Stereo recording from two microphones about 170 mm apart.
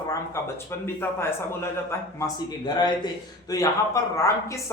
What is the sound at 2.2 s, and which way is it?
A man's voice, 25° left (ahead or behind).